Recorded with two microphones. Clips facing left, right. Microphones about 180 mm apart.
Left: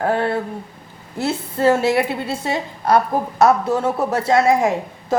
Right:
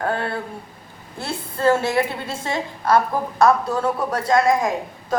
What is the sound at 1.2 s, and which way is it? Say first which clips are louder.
Speech: left 3 dB; 20° left (ahead or behind).